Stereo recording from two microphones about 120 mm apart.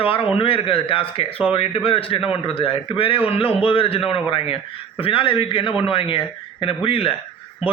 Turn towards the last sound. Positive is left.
turn(degrees=50)  # may be behind; listen again after turning